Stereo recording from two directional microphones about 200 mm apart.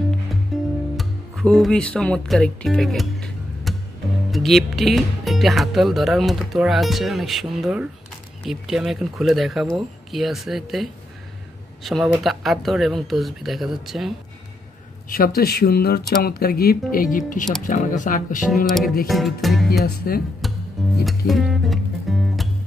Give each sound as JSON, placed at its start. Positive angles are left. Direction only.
{"t": 0.5, "sound": "music", "side_deg": 0}
{"t": 0.9, "sound": "speech", "side_deg": 0}
{"t": 15.0, "sound": "speech", "side_deg": 45}
{"t": 19.0, "sound": "speech", "side_deg": 0}
{"t": 20.1, "sound": "speech", "side_deg": 50}
{"t": 20.4, "sound": "music", "side_deg": 0}